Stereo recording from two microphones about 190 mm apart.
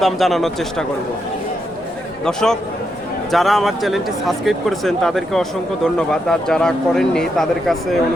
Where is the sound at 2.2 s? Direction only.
5° left (ahead or behind).